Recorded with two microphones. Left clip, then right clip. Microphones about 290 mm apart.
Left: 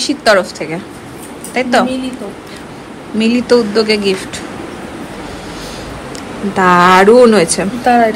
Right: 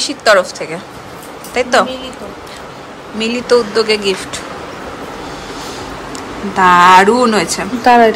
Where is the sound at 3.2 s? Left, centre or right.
Centre.